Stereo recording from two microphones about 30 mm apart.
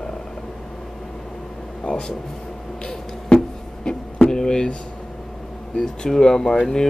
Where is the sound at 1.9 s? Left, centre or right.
Left.